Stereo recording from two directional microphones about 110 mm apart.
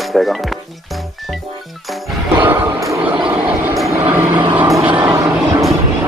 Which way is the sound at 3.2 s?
10° right (ahead or behind).